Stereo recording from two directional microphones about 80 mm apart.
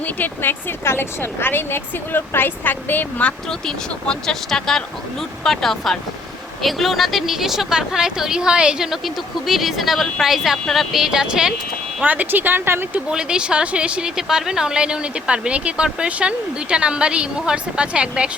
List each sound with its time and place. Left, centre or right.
0.0 s a woman's voice: left; by 11.5 s centre
11.9 s speech: centre
13.1 s a woman's voice: centre